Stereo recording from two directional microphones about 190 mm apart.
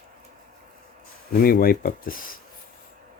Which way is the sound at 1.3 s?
50° left (ahead or behind).